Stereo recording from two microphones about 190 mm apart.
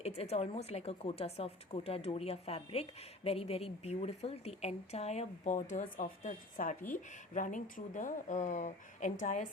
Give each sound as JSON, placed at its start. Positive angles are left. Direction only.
{"t": 0.0, "sound": "speech", "side_deg": 35}
{"t": 5.5, "sound": "a woman's voice", "side_deg": 45}